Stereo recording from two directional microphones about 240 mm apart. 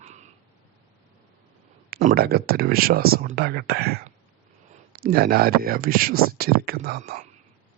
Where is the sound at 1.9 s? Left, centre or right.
Right.